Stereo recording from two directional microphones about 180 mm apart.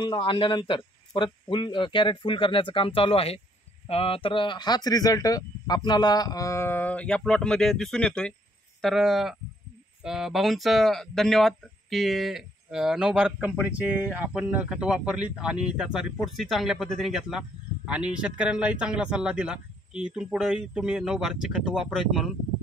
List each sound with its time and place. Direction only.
0.0 s speech: 25° left (ahead or behind); by 22.3 s centre (ahead or behind)